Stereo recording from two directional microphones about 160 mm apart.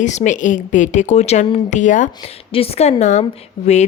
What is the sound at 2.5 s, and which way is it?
Speech, 35° left (ahead or behind).